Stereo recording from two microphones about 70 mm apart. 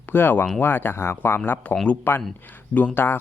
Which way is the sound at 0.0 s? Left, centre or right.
Left.